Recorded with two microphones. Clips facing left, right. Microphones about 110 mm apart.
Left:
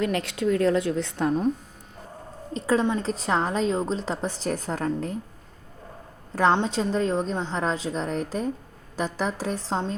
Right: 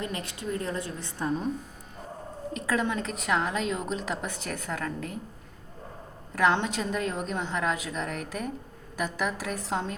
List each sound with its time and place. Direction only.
0.0 s a woman's voice: 90° left; by 1.3 s 70° left (ahead or behind)
2.5 s a woman's voice: 30° left (ahead or behind)
6.7 s a woman's voice: 30° left (ahead or behind)